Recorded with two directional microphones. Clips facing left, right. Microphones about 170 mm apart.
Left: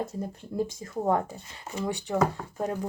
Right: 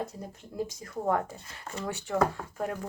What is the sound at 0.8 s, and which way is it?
Speech, 25° left (ahead or behind).